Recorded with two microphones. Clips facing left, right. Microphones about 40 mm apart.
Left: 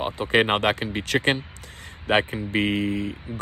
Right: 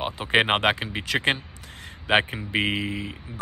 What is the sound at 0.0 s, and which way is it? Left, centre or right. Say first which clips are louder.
Speech: left 1 dB; right.